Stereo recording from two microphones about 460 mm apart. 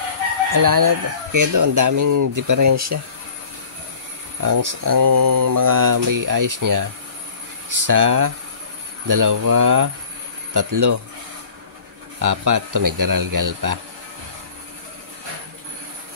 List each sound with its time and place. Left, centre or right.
0.5 s speech: right
4.4 s mantra: right
7.7 s speech: right
12.2 s speech: right